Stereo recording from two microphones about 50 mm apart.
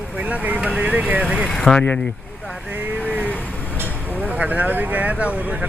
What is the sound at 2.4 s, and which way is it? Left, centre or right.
Vehicle, right.